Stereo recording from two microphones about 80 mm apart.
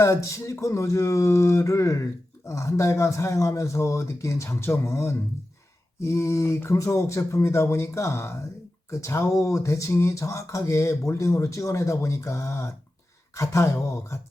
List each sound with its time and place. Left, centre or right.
0.0 s speech: left